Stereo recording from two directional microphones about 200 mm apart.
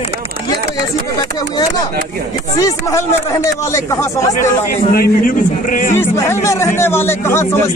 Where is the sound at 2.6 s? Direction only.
15° left (ahead or behind).